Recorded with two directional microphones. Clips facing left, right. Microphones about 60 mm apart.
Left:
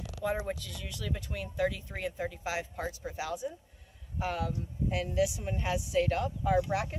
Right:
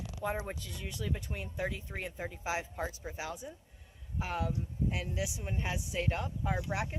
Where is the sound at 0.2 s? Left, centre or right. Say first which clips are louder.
Left 4 dB; right.